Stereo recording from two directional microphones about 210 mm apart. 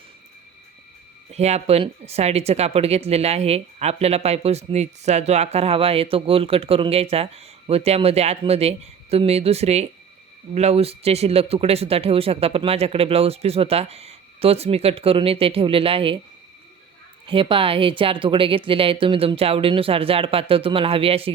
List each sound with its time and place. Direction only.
1.3 s speech: 30° right (ahead or behind)
17.2 s speech: 25° right (ahead or behind)